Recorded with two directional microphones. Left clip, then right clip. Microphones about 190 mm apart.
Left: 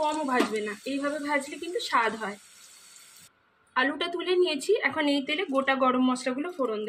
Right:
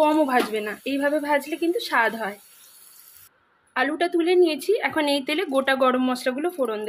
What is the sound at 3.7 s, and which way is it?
A woman's voice, 35° right (ahead or behind).